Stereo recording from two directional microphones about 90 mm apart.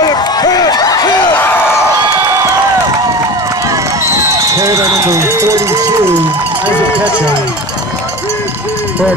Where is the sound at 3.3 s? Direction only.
40° right (ahead or behind); by 6.7 s 20° right (ahead or behind).